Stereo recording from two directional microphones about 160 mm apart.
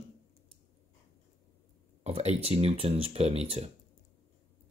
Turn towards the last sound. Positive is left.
turn(degrees=-40)  # may be behind; listen again after turning